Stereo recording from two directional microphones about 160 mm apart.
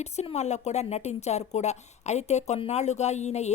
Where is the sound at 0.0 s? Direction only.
45° left (ahead or behind).